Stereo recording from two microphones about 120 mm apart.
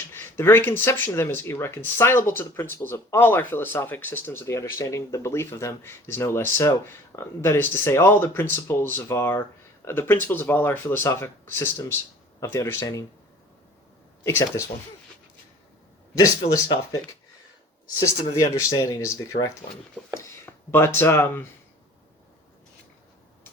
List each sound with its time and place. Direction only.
0.1 s speech: 20° left (ahead or behind)
12.8 s speech: 30° left (ahead or behind)
14.3 s speech: 25° left (ahead or behind)
16.1 s speech: 25° left (ahead or behind)
18.7 s speech: 25° left (ahead or behind)